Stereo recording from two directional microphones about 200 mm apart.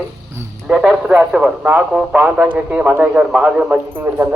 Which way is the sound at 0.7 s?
Centre (ahead or behind).